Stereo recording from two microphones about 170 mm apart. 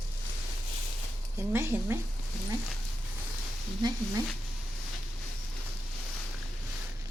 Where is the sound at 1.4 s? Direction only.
15° right (ahead or behind).